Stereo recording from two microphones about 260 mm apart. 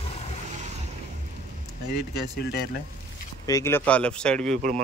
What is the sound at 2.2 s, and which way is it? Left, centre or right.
Speech, left.